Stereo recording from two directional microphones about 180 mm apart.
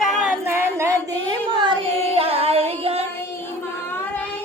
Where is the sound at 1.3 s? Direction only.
25° right (ahead or behind).